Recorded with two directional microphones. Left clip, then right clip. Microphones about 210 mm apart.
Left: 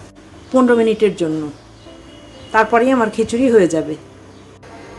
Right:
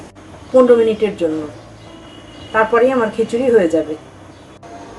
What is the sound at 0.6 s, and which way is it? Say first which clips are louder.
Speech: left 1 dB; 45° left (ahead or behind).